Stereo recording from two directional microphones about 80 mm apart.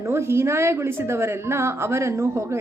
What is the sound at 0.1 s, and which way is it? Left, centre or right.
A woman's voice, right.